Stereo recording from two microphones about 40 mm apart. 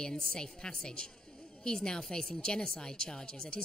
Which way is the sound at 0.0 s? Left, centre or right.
Centre.